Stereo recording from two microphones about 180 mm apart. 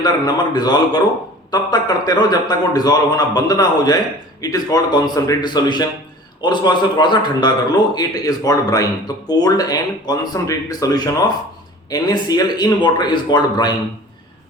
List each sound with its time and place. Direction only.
0.0 s a man's voice: 25° left (ahead or behind)